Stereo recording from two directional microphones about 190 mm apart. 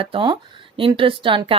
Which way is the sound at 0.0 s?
25° right (ahead or behind).